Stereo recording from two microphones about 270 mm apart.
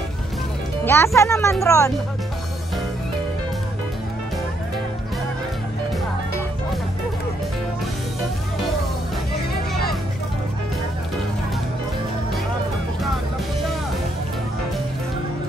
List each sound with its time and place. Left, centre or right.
0.8 s speech: centre